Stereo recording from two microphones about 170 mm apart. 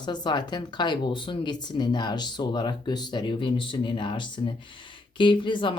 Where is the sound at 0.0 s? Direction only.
25° left (ahead or behind).